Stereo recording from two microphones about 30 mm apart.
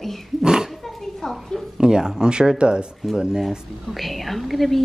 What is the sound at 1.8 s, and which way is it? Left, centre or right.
Speech, right.